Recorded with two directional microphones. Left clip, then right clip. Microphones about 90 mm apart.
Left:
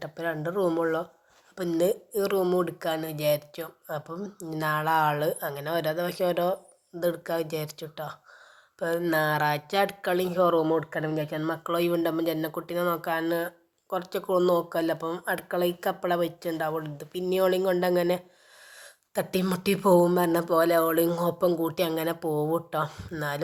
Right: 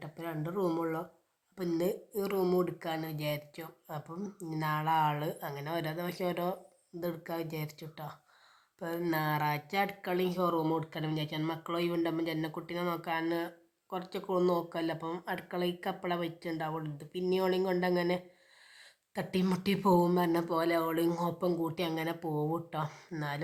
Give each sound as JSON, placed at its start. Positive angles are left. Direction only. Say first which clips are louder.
{"t": 0.0, "sound": "speech", "louder": "left 9 dB", "side_deg": 50}
{"t": 0.6, "sound": "speech", "louder": "left 7 dB", "side_deg": 35}
{"t": 2.4, "sound": "speech", "louder": "left 2 dB", "side_deg": 20}
{"t": 2.6, "sound": "speech", "louder": "left 7 dB", "side_deg": 35}
{"t": 10.2, "sound": "speech", "louder": "left 9 dB", "side_deg": 20}
{"t": 10.6, "sound": "speech", "louder": "left 8 dB", "side_deg": 10}
{"t": 11.5, "sound": "speech", "louder": "left 8 dB", "side_deg": 30}
{"t": 13.2, "sound": "speech", "louder": "left 6 dB", "side_deg": 25}
{"t": 14.7, "sound": "speech", "louder": "left 8 dB", "side_deg": 35}
{"t": 16.5, "sound": "speech", "louder": "left 7 dB", "side_deg": 25}
{"t": 17.7, "sound": "speech", "louder": "left 7 dB", "side_deg": 30}
{"t": 21.1, "sound": "speech", "louder": "left 8 dB", "side_deg": 20}
{"t": 22.8, "sound": "speech", "louder": "left 7 dB", "side_deg": 15}